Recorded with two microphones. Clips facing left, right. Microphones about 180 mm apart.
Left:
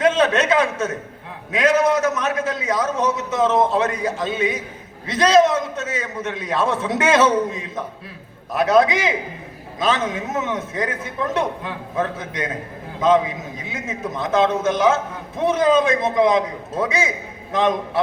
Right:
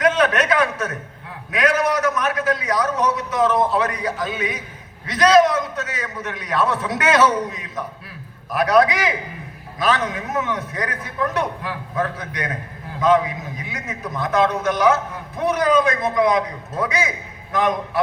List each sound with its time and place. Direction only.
0.0 s a man's voice: 25° left (ahead or behind)